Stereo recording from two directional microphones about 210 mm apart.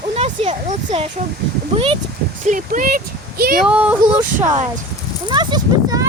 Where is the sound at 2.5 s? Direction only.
40° right (ahead or behind).